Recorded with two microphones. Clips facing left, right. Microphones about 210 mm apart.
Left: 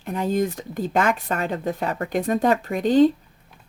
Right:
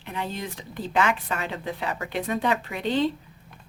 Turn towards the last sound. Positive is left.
turn(degrees=45)  # may be behind; listen again after turning